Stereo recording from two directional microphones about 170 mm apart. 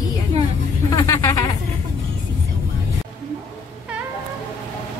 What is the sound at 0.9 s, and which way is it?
Speech, 20° left (ahead or behind).